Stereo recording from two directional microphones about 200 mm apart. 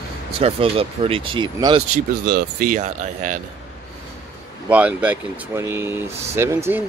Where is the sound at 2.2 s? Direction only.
50° right (ahead or behind).